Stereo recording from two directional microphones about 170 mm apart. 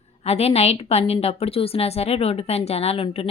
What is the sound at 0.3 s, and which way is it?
A woman's voice, 35° left (ahead or behind).